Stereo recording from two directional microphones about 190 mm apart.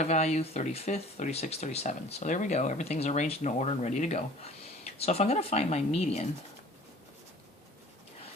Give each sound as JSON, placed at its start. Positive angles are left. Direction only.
{"t": 0.0, "sound": "speech", "side_deg": 40}